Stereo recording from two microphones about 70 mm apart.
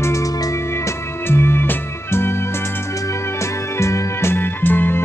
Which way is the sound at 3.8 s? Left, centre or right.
Left.